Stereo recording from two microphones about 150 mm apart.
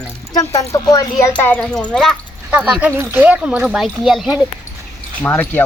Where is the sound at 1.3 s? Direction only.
10° left (ahead or behind).